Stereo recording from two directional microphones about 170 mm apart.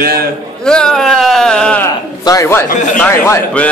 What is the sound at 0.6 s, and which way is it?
Speech, 5° left (ahead or behind).